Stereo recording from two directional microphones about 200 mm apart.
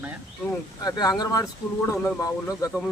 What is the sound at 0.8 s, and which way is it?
Speech, 20° left (ahead or behind).